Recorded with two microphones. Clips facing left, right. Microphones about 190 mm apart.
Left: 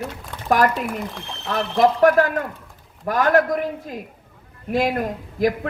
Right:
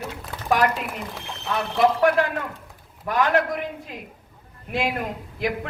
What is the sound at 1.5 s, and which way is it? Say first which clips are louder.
A man's voice: left 3 dB; 40° left (ahead or behind).